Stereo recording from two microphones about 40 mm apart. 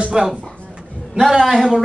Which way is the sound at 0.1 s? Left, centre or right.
Centre.